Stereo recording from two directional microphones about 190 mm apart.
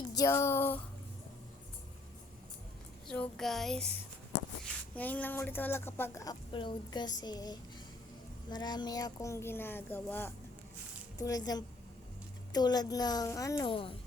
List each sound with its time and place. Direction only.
0.1 s speech: 15° left (ahead or behind)
3.1 s a sound: 5° left (ahead or behind)
4.6 s a woman's voice: 10° left (ahead or behind); by 13.9 s 25° left (ahead or behind)